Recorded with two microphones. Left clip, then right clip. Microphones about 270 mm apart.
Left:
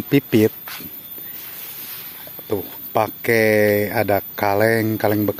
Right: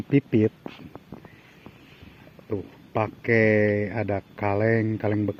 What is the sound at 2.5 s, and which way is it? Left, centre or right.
Speech, centre.